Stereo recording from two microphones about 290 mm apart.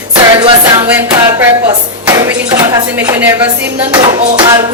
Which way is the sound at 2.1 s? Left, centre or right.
Centre.